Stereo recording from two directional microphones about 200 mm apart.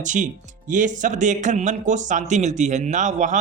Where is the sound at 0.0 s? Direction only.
40° right (ahead or behind).